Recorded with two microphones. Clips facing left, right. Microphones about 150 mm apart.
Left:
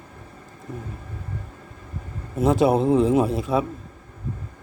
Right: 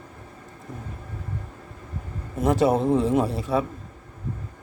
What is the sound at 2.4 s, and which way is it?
A man's voice, 15° left (ahead or behind).